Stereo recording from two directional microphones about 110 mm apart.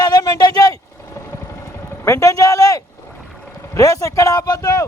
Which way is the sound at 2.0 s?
30° left (ahead or behind).